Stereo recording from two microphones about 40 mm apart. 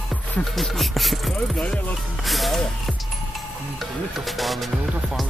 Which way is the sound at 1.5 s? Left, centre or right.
Left.